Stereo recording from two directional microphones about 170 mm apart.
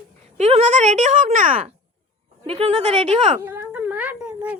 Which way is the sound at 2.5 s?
35° right (ahead or behind).